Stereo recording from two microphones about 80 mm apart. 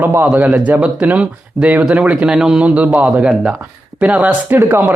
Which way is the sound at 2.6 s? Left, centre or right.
Centre.